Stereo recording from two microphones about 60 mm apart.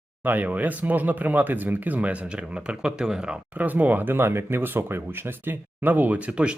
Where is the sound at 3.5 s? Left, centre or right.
Right.